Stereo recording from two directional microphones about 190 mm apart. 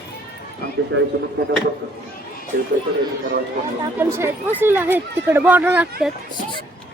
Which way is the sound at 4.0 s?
10° right (ahead or behind).